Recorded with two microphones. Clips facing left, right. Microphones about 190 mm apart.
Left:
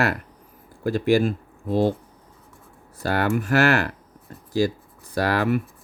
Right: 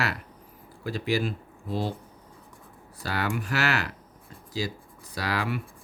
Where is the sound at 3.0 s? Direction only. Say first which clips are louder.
Left 7 dB; 50° left (ahead or behind).